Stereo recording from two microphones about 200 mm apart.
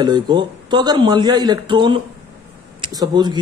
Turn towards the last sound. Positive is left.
turn(degrees=-20)  # may be behind; listen again after turning